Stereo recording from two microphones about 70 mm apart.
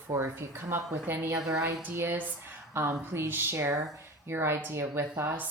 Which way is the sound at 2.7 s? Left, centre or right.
Right.